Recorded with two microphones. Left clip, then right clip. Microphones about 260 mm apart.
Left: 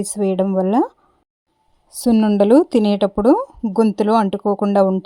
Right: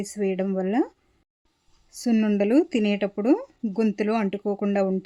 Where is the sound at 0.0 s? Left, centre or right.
Left.